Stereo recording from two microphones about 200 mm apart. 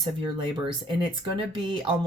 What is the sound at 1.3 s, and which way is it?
Speech, 25° right (ahead or behind).